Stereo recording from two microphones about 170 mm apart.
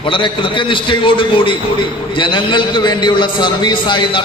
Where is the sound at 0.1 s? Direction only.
30° left (ahead or behind).